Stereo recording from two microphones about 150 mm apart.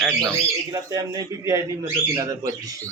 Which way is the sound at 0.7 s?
25° right (ahead or behind).